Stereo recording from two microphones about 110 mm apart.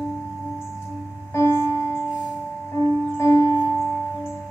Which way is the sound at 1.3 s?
20° left (ahead or behind).